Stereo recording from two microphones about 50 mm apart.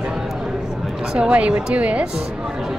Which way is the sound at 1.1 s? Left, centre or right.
Right.